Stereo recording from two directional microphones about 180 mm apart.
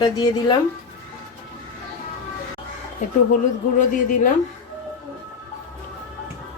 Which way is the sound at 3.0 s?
40° left (ahead or behind).